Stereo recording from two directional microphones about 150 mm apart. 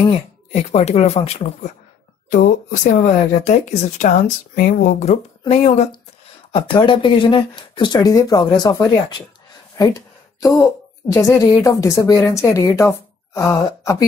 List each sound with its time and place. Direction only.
0.5 s speech: 45° left (ahead or behind)
6.5 s a woman's voice: 35° left (ahead or behind)
9.8 s a sound: 25° left (ahead or behind)
11.1 s a woman's voice: 20° left (ahead or behind)